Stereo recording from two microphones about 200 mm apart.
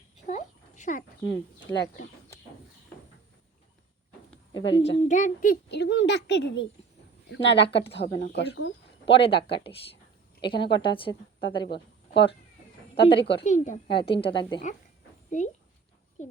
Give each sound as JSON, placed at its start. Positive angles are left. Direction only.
{"t": 0.3, "sound": "a sound", "side_deg": 35}
{"t": 1.7, "sound": "speech", "side_deg": 10}
{"t": 4.5, "sound": "a woman's voice", "side_deg": 25}
{"t": 4.9, "sound": "a child's voice", "side_deg": 40}
{"t": 9.1, "sound": "a woman's voice", "side_deg": 25}
{"t": 11.7, "sound": "a sound", "side_deg": 55}
{"t": 13.0, "sound": "a woman's voice", "side_deg": 25}
{"t": 15.3, "sound": "a woman's voice", "side_deg": 40}